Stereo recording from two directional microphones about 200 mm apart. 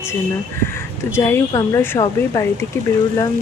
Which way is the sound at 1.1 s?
15° left (ahead or behind).